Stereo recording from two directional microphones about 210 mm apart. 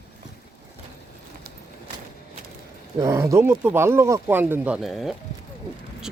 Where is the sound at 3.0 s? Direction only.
15° right (ahead or behind).